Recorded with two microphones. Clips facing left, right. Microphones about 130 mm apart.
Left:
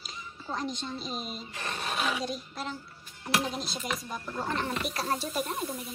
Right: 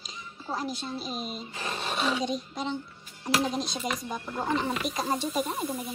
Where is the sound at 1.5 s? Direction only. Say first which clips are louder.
Right 2 dB; 25° right (ahead or behind).